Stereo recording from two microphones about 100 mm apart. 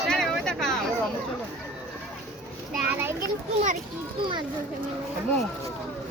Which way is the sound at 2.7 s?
10° right (ahead or behind).